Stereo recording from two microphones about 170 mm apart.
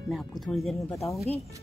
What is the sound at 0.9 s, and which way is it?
Speech, 20° left (ahead or behind).